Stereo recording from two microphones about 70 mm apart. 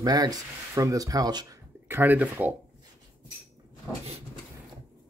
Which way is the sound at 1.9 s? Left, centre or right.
Right.